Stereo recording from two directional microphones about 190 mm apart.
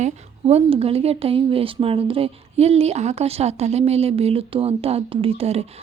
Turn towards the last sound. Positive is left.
turn(degrees=-30)  # may be behind; listen again after turning